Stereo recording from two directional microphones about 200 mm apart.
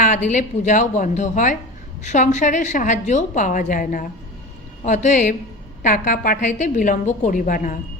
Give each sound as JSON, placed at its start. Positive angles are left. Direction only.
{"t": 0.0, "sound": "a woman's voice", "side_deg": 40}